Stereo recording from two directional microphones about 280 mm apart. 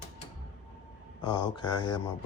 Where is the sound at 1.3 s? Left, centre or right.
Centre.